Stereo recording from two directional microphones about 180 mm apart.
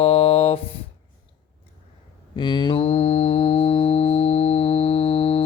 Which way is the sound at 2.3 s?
25° left (ahead or behind).